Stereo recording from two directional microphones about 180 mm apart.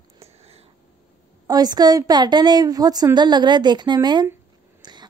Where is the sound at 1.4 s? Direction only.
20° right (ahead or behind).